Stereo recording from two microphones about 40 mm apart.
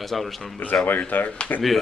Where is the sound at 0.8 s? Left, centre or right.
Left.